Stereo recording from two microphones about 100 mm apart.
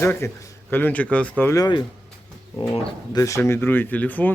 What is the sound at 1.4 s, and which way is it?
Speech, 25° left (ahead or behind).